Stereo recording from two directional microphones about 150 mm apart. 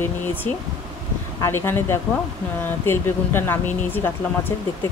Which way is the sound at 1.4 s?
15° left (ahead or behind).